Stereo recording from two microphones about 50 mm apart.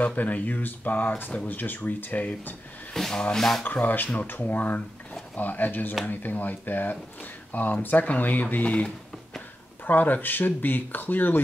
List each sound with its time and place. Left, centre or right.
0.0 s speech: left
2.9 s speech: centre
3.6 s speech: left
9.8 s speech: left